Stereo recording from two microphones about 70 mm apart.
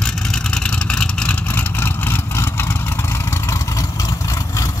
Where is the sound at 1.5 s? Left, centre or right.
Left.